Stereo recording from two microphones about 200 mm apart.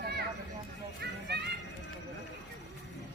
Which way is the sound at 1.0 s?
55° right (ahead or behind).